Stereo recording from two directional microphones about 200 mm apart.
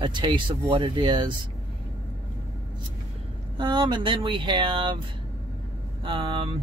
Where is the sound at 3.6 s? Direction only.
25° right (ahead or behind).